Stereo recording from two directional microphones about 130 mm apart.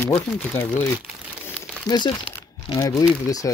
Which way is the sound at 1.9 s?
35° left (ahead or behind).